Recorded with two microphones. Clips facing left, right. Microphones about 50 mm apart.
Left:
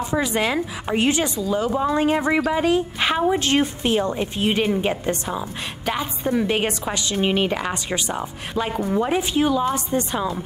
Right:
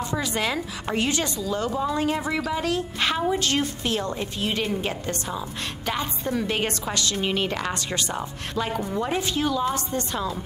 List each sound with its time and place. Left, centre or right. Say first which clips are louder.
0.0 s a woman's voice: left 4 dB; centre
1.8 s a woman's voice: left 6 dB; left